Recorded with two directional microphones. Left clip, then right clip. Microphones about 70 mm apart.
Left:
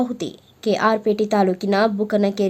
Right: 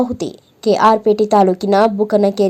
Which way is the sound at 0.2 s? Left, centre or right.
Centre.